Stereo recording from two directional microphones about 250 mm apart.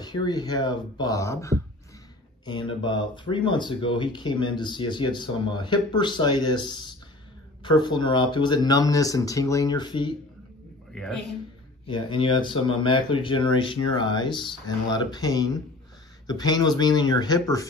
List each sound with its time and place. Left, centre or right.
0.0 s speech: centre
11.8 s speech: centre